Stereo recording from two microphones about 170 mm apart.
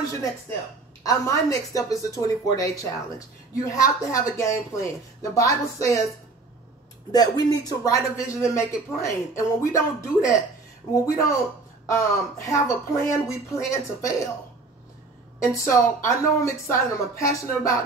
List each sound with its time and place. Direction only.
0.0 s speech: 20° left (ahead or behind)
7.1 s speech: 25° left (ahead or behind)
15.5 s speech: 15° left (ahead or behind)